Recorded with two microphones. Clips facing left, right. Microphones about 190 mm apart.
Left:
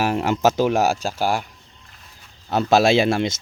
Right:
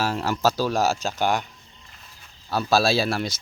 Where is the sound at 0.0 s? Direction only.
20° left (ahead or behind).